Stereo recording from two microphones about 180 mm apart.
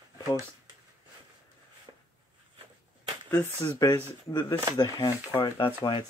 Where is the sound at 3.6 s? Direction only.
15° left (ahead or behind).